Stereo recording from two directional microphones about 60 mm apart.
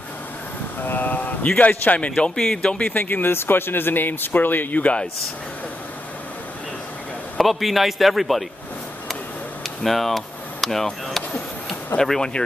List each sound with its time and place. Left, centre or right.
0.7 s a man's voice: left; by 2.9 s centre
2.9 s speech: left
7.3 s a man's voice: centre
9.8 s speech: centre